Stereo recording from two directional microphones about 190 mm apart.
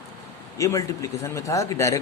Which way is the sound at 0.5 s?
15° left (ahead or behind).